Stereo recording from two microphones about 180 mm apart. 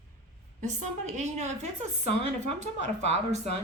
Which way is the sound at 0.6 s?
40° right (ahead or behind).